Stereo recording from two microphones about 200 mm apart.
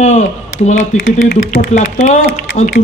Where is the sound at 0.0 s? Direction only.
35° left (ahead or behind).